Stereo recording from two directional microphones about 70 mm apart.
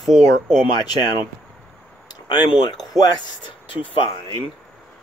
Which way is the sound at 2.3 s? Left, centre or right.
Left.